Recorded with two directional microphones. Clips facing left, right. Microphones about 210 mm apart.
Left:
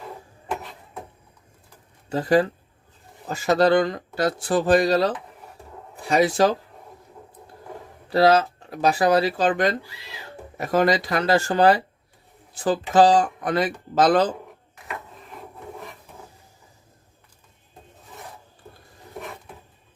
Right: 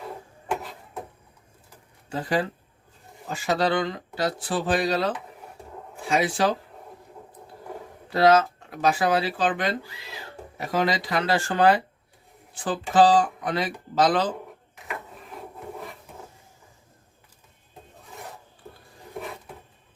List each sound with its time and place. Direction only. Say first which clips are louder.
2.0 s speech: left 7 dB; 40° left (ahead or behind)
8.1 s speech: left 1 dB; 35° left (ahead or behind)